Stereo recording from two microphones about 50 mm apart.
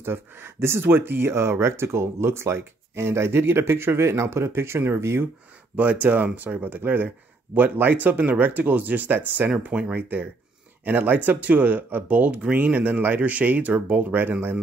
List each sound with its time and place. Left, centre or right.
0.0 s speech: right
5.8 s speech: right
12.5 s speech: right